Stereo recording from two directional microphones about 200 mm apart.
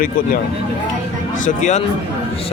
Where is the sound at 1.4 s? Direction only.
35° left (ahead or behind).